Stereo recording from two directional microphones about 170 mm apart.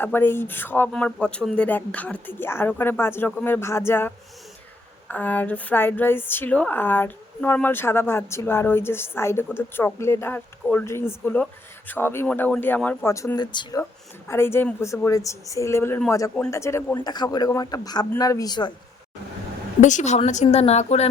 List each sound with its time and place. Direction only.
0.0 s a woman's voice: 10° left (ahead or behind)
14.3 s a woman's voice: 15° left (ahead or behind)
19.8 s a woman's voice: 45° left (ahead or behind)